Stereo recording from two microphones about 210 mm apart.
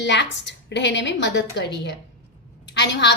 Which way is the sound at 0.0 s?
55° left (ahead or behind).